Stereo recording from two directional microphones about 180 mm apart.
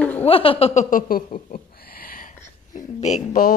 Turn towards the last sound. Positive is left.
turn(degrees=40)  # may be behind; listen again after turning